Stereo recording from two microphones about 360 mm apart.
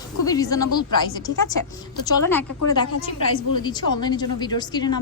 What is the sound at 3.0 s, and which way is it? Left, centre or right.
Speech, left.